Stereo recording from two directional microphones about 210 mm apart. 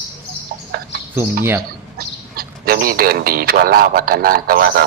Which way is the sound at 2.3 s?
45° right (ahead or behind).